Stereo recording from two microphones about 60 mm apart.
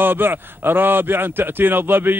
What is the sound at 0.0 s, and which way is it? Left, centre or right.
A man's voice, right.